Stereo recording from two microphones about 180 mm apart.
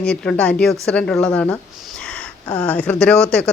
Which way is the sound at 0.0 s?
5° left (ahead or behind).